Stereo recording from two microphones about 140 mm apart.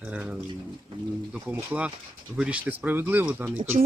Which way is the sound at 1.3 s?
10° right (ahead or behind).